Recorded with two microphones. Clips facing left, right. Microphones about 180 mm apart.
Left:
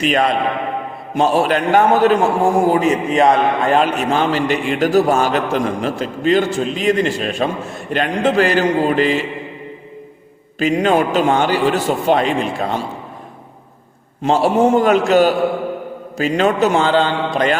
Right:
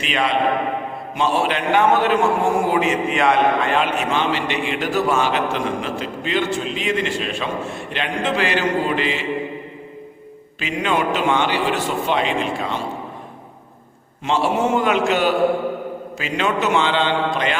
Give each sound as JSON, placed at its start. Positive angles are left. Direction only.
{"t": 0.0, "sound": "a man's voice", "side_deg": 45}
{"t": 10.6, "sound": "a man's voice", "side_deg": 40}
{"t": 14.2, "sound": "a man's voice", "side_deg": 40}